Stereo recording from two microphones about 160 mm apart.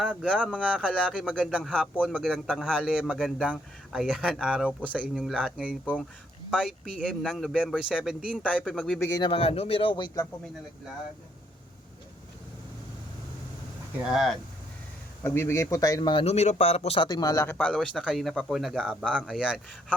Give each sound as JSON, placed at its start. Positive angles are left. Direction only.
{"t": 0.0, "sound": "speech", "side_deg": -5}
{"t": 5.1, "sound": "speech", "side_deg": 5}
{"t": 5.8, "sound": "speech", "side_deg": 10}
{"t": 6.5, "sound": "speech", "side_deg": -5}
{"t": 9.2, "sound": "a man's voice", "side_deg": 35}
{"t": 14.0, "sound": "speech", "side_deg": 0}
{"t": 15.2, "sound": "speech", "side_deg": 15}
{"t": 16.2, "sound": "a man's voice", "side_deg": 45}
{"t": 17.1, "sound": "speech", "side_deg": 25}